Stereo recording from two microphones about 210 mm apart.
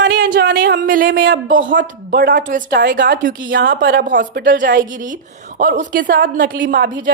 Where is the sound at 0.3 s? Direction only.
50° right (ahead or behind).